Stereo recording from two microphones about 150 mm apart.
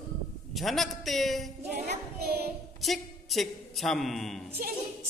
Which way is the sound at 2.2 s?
90° right.